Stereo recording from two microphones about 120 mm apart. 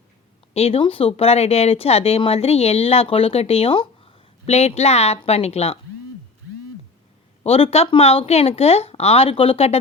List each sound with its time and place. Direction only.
0.5 s speech: 55° left (ahead or behind)
7.4 s speech: 55° left (ahead or behind)